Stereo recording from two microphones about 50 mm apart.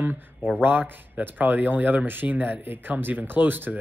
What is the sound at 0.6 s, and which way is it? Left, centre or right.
Speech, right.